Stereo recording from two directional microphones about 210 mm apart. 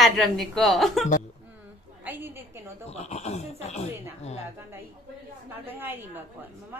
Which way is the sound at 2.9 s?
30° left (ahead or behind).